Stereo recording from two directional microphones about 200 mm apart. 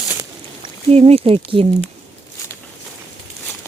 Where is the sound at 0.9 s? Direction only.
30° right (ahead or behind).